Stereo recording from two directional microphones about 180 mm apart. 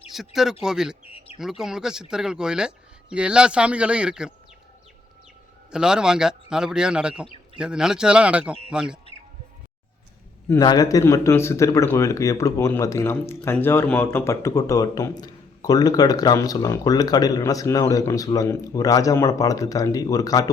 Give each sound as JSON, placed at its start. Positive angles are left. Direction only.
{"t": 0.6, "sound": "speech", "side_deg": -5}
{"t": 1.0, "sound": "speech", "side_deg": 30}
{"t": 1.4, "sound": "speech", "side_deg": 0}
{"t": 5.7, "sound": "speech", "side_deg": -5}
{"t": 10.6, "sound": "speech", "side_deg": 20}